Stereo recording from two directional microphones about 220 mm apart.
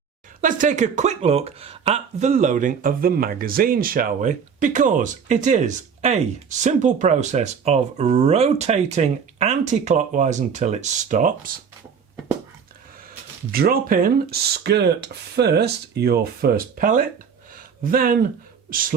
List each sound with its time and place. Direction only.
0.4 s speech: 35° right (ahead or behind)
13.1 s speech: 45° right (ahead or behind)
17.5 s a sound: 40° right (ahead or behind)
18.7 s speech: 40° right (ahead or behind)